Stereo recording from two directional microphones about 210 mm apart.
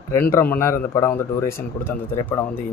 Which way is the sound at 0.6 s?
15° left (ahead or behind).